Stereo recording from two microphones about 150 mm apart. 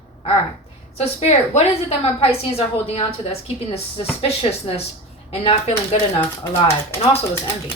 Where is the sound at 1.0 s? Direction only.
45° left (ahead or behind).